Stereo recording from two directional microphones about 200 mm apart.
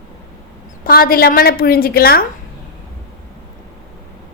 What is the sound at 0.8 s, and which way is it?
A woman's voice, 45° left (ahead or behind).